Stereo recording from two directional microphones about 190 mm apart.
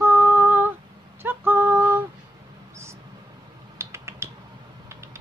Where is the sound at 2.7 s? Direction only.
15° right (ahead or behind).